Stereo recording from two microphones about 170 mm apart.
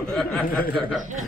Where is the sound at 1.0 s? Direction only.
50° right (ahead or behind).